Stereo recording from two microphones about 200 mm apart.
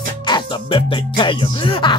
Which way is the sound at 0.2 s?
20° left (ahead or behind).